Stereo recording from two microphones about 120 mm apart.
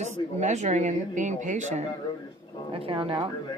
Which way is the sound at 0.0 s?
75° right (ahead or behind).